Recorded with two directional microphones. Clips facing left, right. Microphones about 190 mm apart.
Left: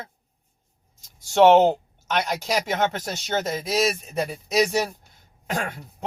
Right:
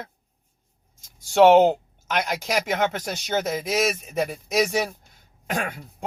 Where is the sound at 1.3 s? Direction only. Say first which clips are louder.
Right 1 dB; 5° right (ahead or behind).